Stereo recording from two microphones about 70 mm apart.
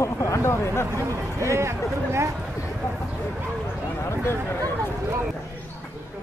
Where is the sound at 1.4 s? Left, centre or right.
Right.